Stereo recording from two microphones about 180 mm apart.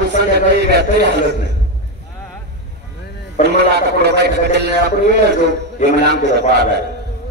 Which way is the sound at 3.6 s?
65° right (ahead or behind).